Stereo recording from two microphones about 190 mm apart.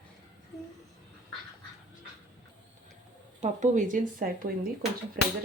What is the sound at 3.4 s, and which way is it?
Speech, 40° right (ahead or behind).